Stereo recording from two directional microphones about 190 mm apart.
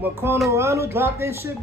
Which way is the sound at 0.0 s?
10° right (ahead or behind).